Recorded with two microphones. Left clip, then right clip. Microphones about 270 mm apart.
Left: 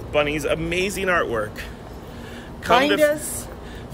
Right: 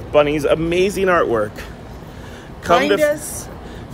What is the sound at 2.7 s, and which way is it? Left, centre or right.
Speech, centre.